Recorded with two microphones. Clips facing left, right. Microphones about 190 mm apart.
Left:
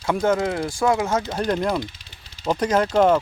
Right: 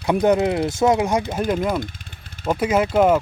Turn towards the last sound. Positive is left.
turn(degrees=-10)  # may be behind; listen again after turning